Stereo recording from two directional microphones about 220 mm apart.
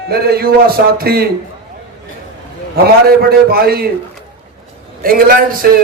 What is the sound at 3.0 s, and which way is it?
Speech, 45° right (ahead or behind).